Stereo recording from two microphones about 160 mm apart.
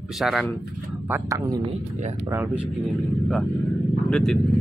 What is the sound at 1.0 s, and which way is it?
Speech, 10° right (ahead or behind).